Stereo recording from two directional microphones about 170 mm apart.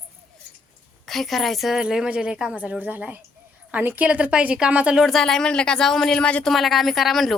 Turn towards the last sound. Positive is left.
turn(degrees=0)  # may be behind; listen again after turning